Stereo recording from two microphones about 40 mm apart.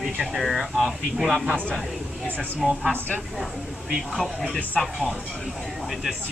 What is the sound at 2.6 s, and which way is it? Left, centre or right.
Speech, centre.